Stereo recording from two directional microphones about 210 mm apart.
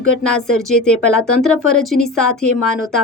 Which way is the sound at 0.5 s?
5° left (ahead or behind).